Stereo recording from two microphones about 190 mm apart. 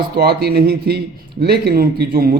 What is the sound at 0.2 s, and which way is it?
A man's voice, 55° right (ahead or behind).